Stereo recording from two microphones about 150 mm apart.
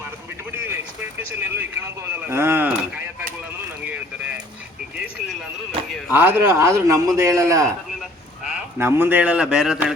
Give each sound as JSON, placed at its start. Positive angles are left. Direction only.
{"t": 0.5, "sound": "vehicle", "side_deg": -15}
{"t": 1.3, "sound": "speech", "side_deg": -15}
{"t": 3.8, "sound": "a sound", "side_deg": -10}
{"t": 6.1, "sound": "a man's voice", "side_deg": -15}
{"t": 8.8, "sound": "speech", "side_deg": -15}